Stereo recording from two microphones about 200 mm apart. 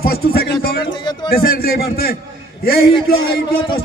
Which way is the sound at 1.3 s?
50° left (ahead or behind).